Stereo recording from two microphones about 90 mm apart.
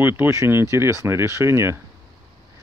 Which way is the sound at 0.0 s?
25° right (ahead or behind).